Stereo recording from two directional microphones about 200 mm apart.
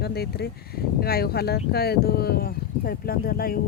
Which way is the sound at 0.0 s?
55° left (ahead or behind).